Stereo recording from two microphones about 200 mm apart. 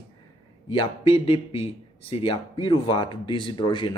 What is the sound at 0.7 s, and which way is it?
Speech, 25° left (ahead or behind).